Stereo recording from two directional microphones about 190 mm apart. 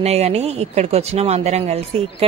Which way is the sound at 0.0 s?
35° right (ahead or behind).